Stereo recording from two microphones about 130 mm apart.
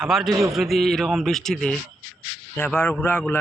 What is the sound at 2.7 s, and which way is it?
Speech, 15° left (ahead or behind).